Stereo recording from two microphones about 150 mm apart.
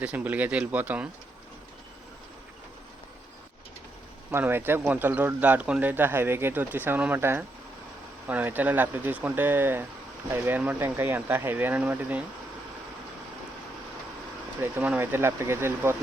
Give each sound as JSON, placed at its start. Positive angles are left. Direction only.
{"t": 0.0, "sound": "a man's voice", "side_deg": -10}
{"t": 4.3, "sound": "a man's voice", "side_deg": -15}
{"t": 14.6, "sound": "a man's voice", "side_deg": -10}